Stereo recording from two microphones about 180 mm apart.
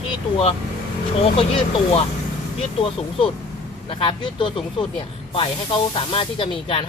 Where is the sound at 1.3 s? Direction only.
30° left (ahead or behind).